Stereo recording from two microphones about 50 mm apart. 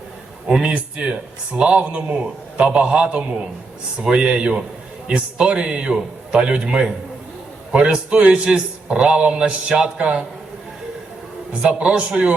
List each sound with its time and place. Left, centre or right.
0.4 s a man's voice: centre
0.7 s a man's voice: right
11.6 s a man's voice: centre